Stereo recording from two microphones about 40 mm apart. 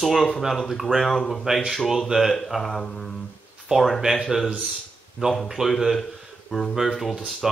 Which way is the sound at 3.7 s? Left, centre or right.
Centre.